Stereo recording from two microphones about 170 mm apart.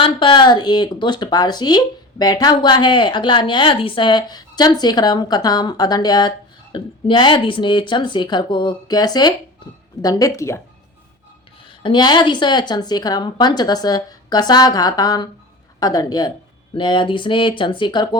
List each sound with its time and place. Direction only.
0.0 s speech: 30° left (ahead or behind)
11.6 s speech: 30° left (ahead or behind)